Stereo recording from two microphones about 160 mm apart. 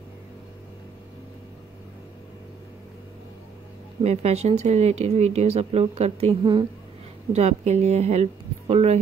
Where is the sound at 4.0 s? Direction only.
40° right (ahead or behind).